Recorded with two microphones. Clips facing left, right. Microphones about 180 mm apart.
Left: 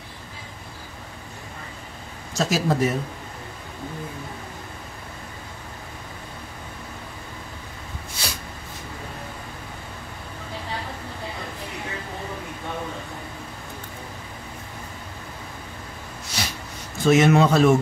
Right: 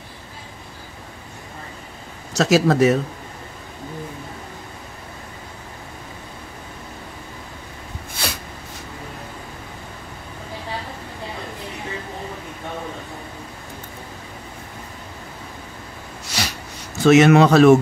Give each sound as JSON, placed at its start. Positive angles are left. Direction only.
{"t": 2.3, "sound": "speech", "side_deg": -80}
{"t": 8.2, "sound": "snort", "side_deg": -55}
{"t": 16.3, "sound": "snort", "side_deg": -75}
{"t": 17.0, "sound": "speech", "side_deg": -75}